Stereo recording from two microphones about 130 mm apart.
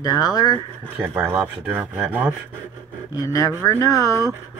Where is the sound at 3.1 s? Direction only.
25° left (ahead or behind).